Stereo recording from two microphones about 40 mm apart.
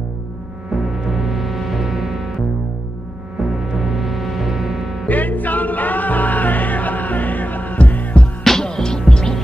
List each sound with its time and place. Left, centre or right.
0.7 s music: centre
3.3 s music: centre
5.0 s music: left
8.5 s music: centre